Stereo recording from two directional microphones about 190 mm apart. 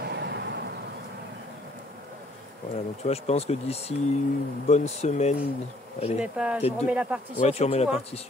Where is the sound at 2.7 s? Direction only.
35° left (ahead or behind).